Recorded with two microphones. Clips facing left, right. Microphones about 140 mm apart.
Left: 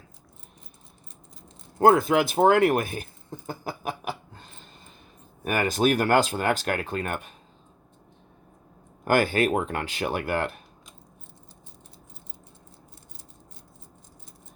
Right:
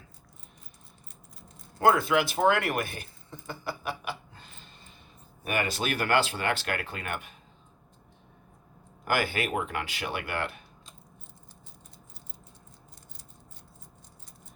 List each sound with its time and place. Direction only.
1.8 s speech: 45° left (ahead or behind)
5.5 s speech: 45° left (ahead or behind)
9.0 s speech: 45° left (ahead or behind)